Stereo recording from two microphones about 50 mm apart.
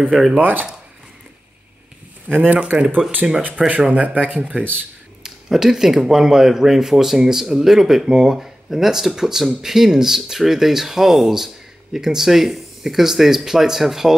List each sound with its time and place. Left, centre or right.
0.4 s speech: right
2.5 s speech: right
3.2 s speech: centre
3.9 s speech: right
5.2 s speech: centre